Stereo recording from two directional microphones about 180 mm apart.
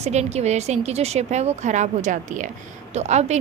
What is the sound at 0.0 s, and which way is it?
Speech, 35° right (ahead or behind).